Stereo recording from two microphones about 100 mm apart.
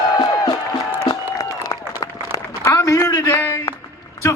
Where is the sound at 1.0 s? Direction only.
35° left (ahead or behind).